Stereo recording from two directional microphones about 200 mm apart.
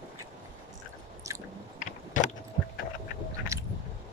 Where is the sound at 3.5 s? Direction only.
15° right (ahead or behind).